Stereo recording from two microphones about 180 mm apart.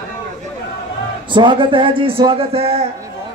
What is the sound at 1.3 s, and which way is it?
Speech, 25° right (ahead or behind).